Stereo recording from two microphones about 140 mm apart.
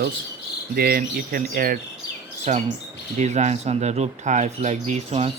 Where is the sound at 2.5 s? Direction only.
55° right (ahead or behind).